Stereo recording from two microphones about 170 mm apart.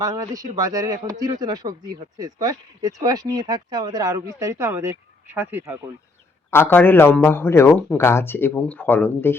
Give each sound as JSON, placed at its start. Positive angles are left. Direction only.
{"t": 0.0, "sound": "speech", "side_deg": -20}
{"t": 6.5, "sound": "a man's voice", "side_deg": 10}